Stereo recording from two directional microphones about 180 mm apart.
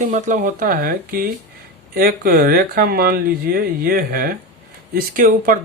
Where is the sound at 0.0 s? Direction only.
45° right (ahead or behind).